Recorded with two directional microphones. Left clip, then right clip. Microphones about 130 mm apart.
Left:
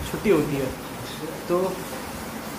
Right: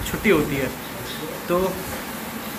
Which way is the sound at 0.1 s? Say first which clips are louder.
Right 3 dB; 5° right (ahead or behind).